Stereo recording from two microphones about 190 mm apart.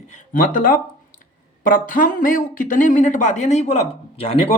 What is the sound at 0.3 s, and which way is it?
Speech, 45° left (ahead or behind).